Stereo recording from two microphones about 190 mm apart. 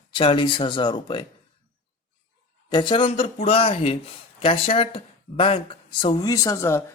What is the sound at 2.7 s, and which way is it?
Speech, 25° left (ahead or behind).